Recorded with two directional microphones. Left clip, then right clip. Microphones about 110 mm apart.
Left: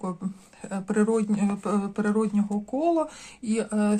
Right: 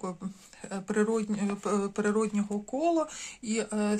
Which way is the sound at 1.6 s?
25° right (ahead or behind).